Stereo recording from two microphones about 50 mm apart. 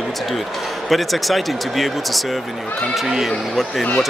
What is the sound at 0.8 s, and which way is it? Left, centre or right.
Speech, centre.